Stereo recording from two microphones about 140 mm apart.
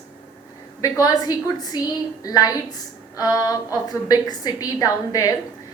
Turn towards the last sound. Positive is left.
turn(degrees=25)  # may be behind; listen again after turning